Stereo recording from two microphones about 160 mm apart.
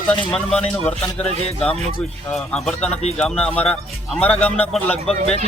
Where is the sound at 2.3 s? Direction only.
5° left (ahead or behind).